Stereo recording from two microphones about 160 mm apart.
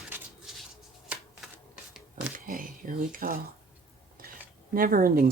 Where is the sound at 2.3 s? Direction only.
60° right (ahead or behind).